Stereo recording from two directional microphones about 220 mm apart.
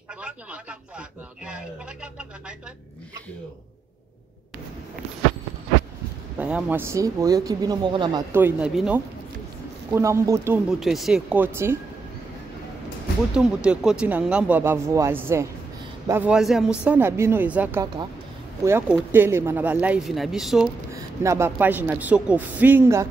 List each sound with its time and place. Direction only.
0.2 s speech: 5° right (ahead or behind)
6.4 s speech: 5° right (ahead or behind)
8.4 s speech: 5° right (ahead or behind)
13.3 s speech: 5° right (ahead or behind)
20.9 s speech: 15° right (ahead or behind)